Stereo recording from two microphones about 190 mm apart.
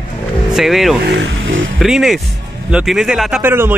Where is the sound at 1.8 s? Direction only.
Centre (ahead or behind).